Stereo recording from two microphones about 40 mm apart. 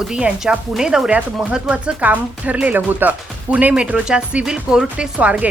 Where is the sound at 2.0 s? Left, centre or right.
Right.